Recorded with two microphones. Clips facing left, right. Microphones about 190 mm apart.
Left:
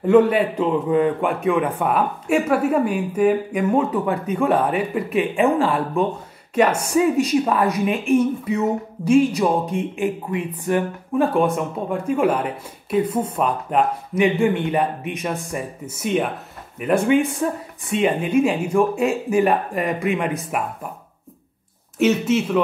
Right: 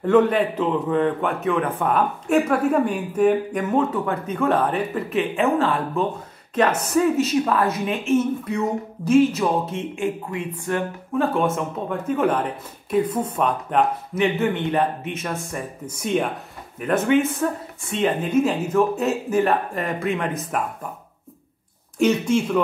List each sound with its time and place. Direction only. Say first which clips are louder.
0.0 s a woman's voice: left 2 dB; 10° left (ahead or behind)
21.9 s speech: left 1 dB; 5° left (ahead or behind)